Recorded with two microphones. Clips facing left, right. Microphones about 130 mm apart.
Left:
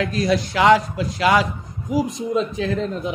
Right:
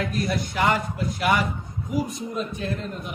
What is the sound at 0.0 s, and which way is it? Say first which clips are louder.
Speech: left 6 dB; 90° left.